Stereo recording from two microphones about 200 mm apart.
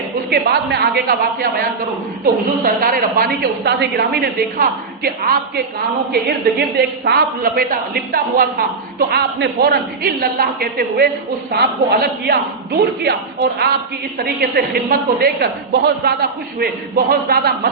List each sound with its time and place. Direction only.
0.3 s a woman's voice: 55° right (ahead or behind)
14.2 s a woman's voice: 50° right (ahead or behind)